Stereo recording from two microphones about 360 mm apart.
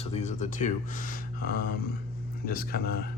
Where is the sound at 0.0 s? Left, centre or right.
Centre.